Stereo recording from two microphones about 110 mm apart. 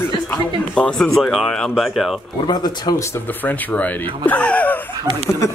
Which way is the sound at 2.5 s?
40° left (ahead or behind).